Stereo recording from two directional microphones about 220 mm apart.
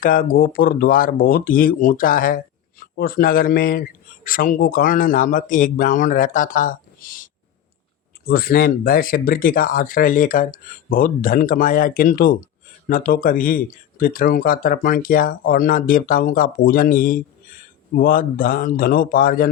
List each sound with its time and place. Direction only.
0.0 s a man's voice: 40° left (ahead or behind)
8.3 s a man's voice: 45° left (ahead or behind)